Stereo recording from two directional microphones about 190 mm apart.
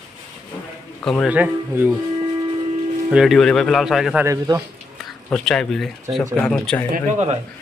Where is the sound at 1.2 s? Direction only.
10° right (ahead or behind).